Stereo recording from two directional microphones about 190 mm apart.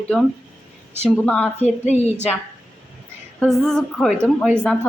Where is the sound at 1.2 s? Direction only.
5° left (ahead or behind).